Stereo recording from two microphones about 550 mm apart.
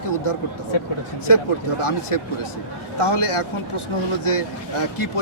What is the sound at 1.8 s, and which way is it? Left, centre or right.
A man's voice, left.